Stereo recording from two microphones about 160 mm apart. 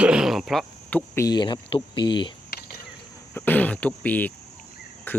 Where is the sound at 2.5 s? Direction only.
85° left.